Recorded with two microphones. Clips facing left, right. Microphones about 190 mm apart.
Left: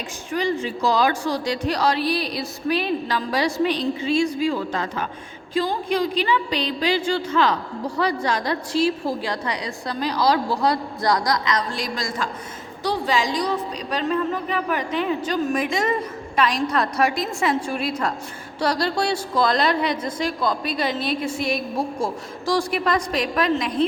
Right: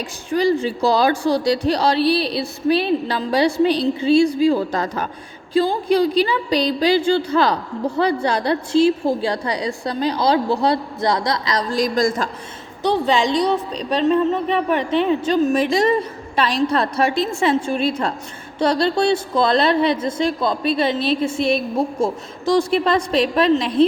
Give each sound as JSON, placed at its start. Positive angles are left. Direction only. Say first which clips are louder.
{"t": 0.3, "sound": "a woman's voice", "louder": "right 6 dB", "side_deg": -35}
{"t": 12.8, "sound": "a woman's voice", "louder": "right 5 dB", "side_deg": -25}